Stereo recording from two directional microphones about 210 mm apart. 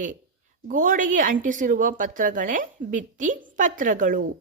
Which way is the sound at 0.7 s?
40° right (ahead or behind).